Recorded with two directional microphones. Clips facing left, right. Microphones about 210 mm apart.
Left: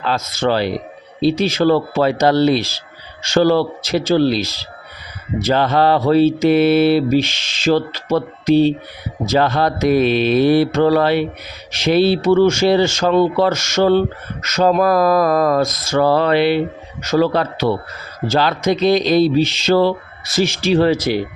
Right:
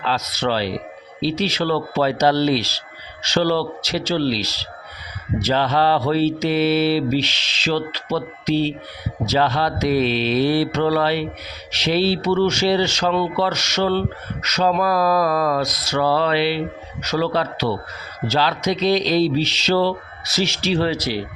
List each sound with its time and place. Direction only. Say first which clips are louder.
0.0 s speech: left 4 dB; 50° left (ahead or behind)